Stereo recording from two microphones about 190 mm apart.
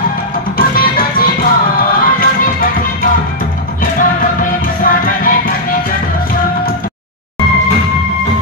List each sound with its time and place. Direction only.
0.6 s music: 50° left (ahead or behind)